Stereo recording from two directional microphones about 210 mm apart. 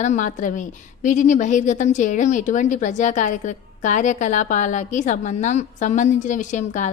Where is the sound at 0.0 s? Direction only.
35° left (ahead or behind).